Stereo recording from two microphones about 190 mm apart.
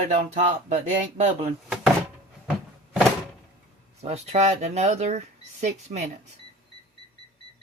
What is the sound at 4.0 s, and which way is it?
Speech, 35° right (ahead or behind).